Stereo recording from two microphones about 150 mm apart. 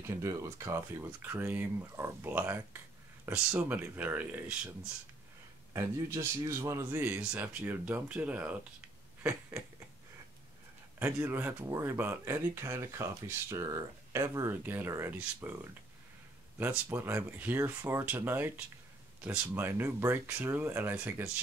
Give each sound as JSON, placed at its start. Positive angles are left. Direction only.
{"t": 0.0, "sound": "speech", "side_deg": -20}
{"t": 5.7, "sound": "speech", "side_deg": -20}
{"t": 11.0, "sound": "speech", "side_deg": -15}
{"t": 16.5, "sound": "speech", "side_deg": -15}